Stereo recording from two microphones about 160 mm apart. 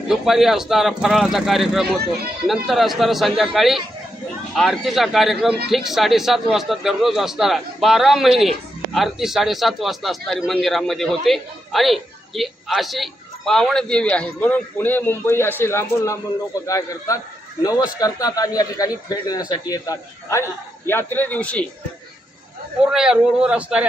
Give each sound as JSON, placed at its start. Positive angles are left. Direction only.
{"t": 0.1, "sound": "a man's voice", "side_deg": 0}
{"t": 22.9, "sound": "speech", "side_deg": -5}